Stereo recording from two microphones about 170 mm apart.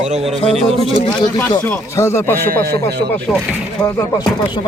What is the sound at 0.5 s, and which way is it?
Speech, 35° right (ahead or behind).